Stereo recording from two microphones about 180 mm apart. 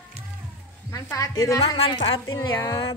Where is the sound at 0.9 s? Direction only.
20° left (ahead or behind).